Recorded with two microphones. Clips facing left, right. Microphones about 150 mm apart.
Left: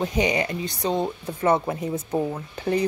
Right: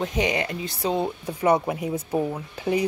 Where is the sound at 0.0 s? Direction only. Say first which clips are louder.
Left 2 dB; centre (ahead or behind).